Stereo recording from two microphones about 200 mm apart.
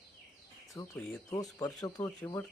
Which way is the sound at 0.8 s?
5° left (ahead or behind).